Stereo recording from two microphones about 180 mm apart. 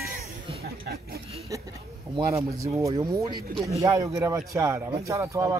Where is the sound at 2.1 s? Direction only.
20° right (ahead or behind).